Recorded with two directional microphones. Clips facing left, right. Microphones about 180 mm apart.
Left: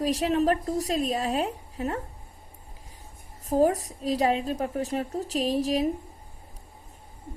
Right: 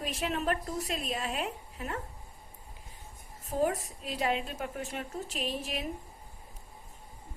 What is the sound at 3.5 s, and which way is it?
A woman's voice, 40° left (ahead or behind).